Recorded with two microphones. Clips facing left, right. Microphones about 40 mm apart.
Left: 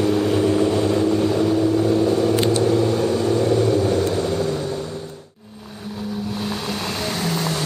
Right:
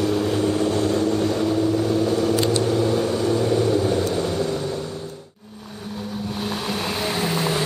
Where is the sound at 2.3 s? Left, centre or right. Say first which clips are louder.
Left 2 dB; left.